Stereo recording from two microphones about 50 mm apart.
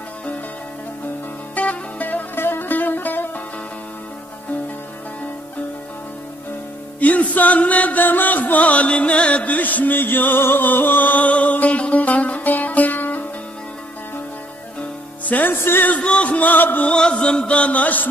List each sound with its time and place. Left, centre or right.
1.5 s music: left
2.3 s music: left
7.0 s music: left
15.2 s music: left
15.5 s music: left
15.9 s music: left
16.8 s chant: left